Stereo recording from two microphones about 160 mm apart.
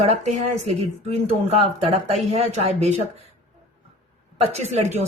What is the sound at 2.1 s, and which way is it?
Speech, 40° right (ahead or behind).